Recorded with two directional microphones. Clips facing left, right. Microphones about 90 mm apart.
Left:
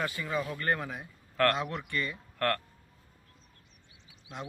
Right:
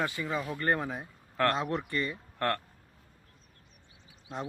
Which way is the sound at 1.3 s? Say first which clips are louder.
Left 1 dB; 20° right (ahead or behind).